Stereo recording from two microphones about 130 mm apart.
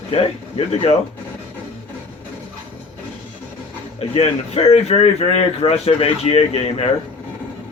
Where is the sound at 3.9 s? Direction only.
50° left (ahead or behind).